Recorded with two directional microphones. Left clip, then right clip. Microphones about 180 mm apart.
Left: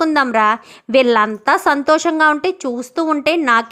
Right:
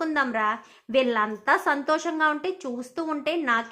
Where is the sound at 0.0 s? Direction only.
45° left (ahead or behind).